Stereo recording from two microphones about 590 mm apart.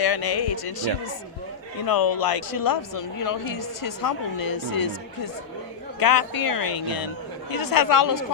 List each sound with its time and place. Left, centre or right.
0.0 s speech: left
1.9 s speech: left